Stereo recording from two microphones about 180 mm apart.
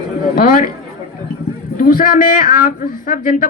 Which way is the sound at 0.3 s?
50° left (ahead or behind).